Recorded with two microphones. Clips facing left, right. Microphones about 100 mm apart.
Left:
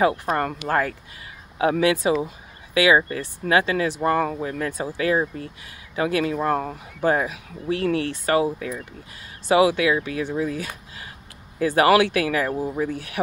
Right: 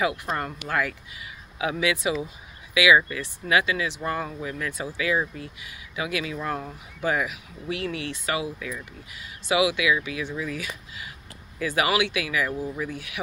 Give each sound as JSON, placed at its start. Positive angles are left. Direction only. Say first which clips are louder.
{"t": 0.0, "sound": "speech", "louder": "left 6 dB", "side_deg": 40}
{"t": 2.2, "sound": "a sound", "louder": "left 4 dB", "side_deg": 40}
{"t": 3.0, "sound": "speech", "louder": "left 3 dB", "side_deg": 40}